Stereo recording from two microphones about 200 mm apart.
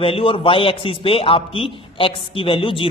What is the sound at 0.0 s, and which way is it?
A man's voice, 30° left (ahead or behind).